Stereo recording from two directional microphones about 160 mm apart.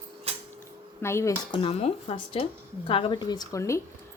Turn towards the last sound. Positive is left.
turn(degrees=20)  # may be behind; listen again after turning